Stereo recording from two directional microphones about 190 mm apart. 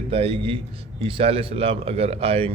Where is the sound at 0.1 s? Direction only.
30° right (ahead or behind).